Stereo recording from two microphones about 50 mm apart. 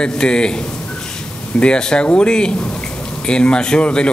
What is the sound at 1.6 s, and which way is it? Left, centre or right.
A man's voice, centre.